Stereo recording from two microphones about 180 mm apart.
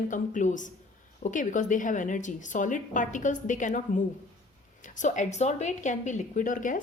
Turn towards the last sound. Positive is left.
turn(degrees=45)  # may be behind; listen again after turning